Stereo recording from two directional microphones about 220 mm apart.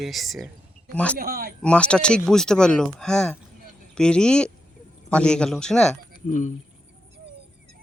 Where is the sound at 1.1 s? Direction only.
45° right (ahead or behind).